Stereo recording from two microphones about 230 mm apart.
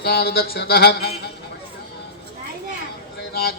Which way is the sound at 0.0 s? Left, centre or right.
Left.